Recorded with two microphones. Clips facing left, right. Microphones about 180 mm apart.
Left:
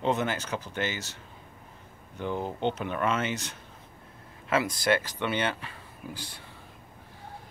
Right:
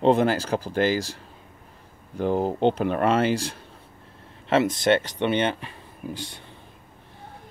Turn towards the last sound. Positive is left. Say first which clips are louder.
# right 6 dB
turn(degrees=-15)  # may be behind; listen again after turning